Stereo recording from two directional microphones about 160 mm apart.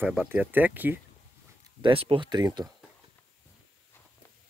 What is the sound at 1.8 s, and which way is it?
Speech, 35° right (ahead or behind).